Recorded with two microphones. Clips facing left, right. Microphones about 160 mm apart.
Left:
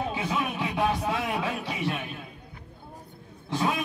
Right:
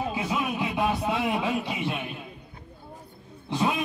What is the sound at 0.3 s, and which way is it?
Music, 10° right (ahead or behind).